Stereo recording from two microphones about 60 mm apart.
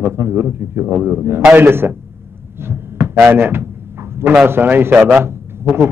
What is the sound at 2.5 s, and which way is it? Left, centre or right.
Heart sounds, right.